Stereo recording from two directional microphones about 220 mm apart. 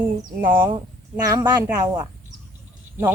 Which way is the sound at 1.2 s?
15° right (ahead or behind).